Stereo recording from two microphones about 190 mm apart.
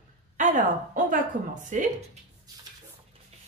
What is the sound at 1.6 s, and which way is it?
Speech, 40° right (ahead or behind).